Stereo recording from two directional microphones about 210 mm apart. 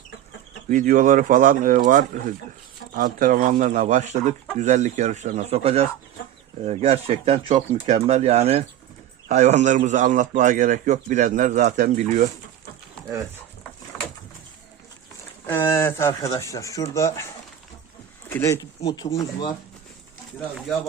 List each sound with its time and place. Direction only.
0.7 s a man's voice: 40° right (ahead or behind)
13.9 s bird: 5° left (ahead or behind)
15.4 s speech: 10° left (ahead or behind)
18.3 s speech: 10° left (ahead or behind)